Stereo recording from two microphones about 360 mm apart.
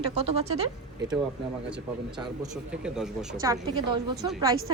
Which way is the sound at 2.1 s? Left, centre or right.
Centre.